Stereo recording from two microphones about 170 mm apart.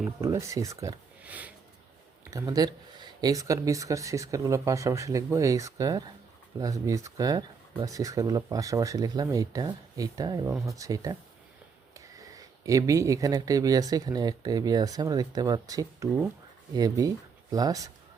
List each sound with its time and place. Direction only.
0.2 s speech: 20° right (ahead or behind)
1.2 s sniff: 10° right (ahead or behind)
2.3 s speech: 20° right (ahead or behind)